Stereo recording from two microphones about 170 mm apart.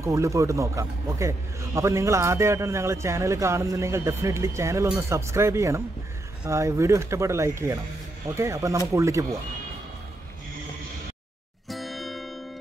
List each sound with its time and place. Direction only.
0.0 s speech: 15° right (ahead or behind)
11.7 s music: centre (ahead or behind)